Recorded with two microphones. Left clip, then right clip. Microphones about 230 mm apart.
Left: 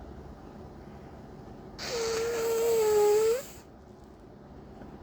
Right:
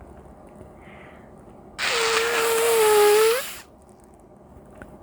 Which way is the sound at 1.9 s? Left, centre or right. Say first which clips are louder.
Right 9 dB; right.